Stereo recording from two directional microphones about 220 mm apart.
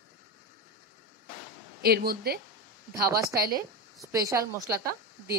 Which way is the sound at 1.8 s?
45° right (ahead or behind).